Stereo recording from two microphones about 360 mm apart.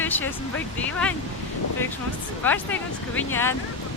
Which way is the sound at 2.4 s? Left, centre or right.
Centre.